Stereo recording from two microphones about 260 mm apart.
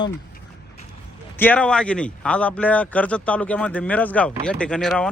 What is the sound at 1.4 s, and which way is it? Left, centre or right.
A man's voice, centre.